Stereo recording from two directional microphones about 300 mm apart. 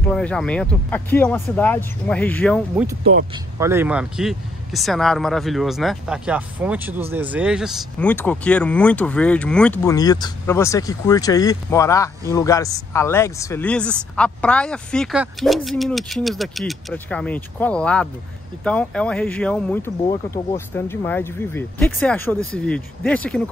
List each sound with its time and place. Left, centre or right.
0.1 s speech: centre
3.0 s speech: right
3.5 s speech: centre